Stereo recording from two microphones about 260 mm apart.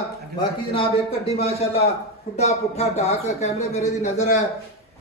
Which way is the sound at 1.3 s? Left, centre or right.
Left.